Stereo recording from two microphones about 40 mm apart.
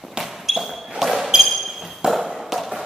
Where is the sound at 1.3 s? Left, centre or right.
Centre.